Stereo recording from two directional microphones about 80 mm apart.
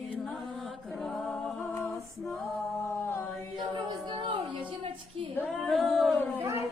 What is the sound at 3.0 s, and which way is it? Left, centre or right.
Chant, left.